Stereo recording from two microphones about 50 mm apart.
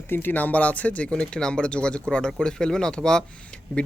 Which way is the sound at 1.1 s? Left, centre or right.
Centre.